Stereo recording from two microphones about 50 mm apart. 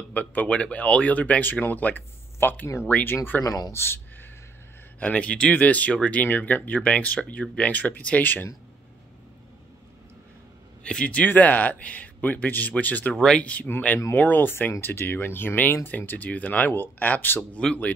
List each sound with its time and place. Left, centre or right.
0.1 s speech: left
3.4 s speech: left
5.0 s speech: left
10.8 s speech: left
13.1 s speech: centre
13.4 s speech: left
17.6 s speech: centre